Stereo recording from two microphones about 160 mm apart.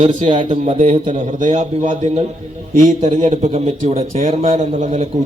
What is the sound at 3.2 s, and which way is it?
A man's voice, 45° right (ahead or behind).